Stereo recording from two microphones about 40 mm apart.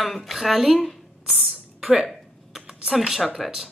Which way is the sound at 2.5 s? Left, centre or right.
Centre.